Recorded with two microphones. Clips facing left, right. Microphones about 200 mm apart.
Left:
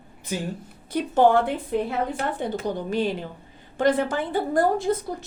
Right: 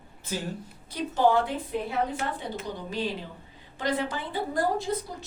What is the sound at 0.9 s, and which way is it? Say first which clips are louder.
A woman's voice: left 5 dB; 55° left (ahead or behind).